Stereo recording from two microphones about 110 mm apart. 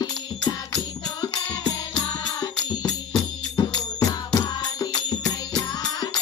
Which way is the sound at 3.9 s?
35° left (ahead or behind).